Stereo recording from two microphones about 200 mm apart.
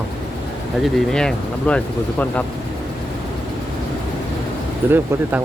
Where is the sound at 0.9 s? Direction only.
5° left (ahead or behind).